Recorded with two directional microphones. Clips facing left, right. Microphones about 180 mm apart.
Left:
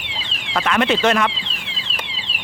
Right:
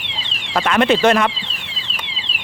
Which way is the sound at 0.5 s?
35° right (ahead or behind).